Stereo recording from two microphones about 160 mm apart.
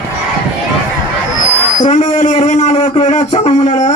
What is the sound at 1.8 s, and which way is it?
Speech, 50° left (ahead or behind).